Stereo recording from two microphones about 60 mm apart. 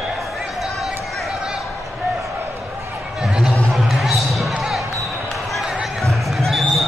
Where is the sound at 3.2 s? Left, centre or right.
Centre.